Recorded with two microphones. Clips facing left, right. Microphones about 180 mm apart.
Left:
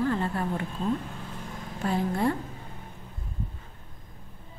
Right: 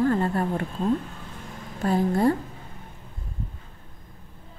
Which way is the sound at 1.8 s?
40° right (ahead or behind).